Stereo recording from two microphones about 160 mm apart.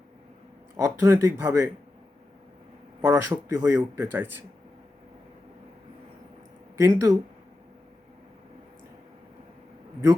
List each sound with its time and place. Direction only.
0.8 s speech: 15° right (ahead or behind)
3.0 s speech: 15° right (ahead or behind)
6.7 s speech: 20° right (ahead or behind)